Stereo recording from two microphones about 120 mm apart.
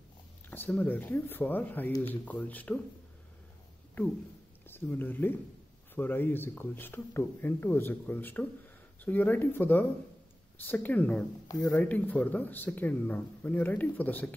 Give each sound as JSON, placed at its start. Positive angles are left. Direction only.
{"t": 0.5, "sound": "speech", "side_deg": 15}
{"t": 4.6, "sound": "speech", "side_deg": 15}